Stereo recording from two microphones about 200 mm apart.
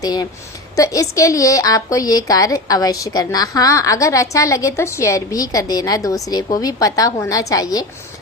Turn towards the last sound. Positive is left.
turn(degrees=20)  # may be behind; listen again after turning